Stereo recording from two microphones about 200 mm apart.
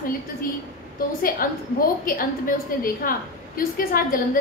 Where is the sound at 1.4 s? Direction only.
45° left (ahead or behind).